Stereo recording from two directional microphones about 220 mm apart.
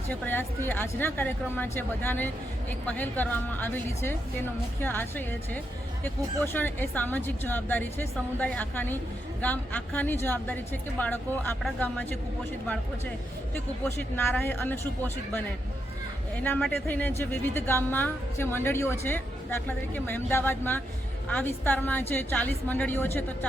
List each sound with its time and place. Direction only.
0.1 s a woman's voice: 10° left (ahead or behind)
13.8 s a woman's voice: 10° left (ahead or behind)